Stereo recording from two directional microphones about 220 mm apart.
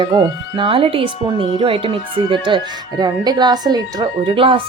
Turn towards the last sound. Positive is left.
turn(degrees=-25)  # may be behind; listen again after turning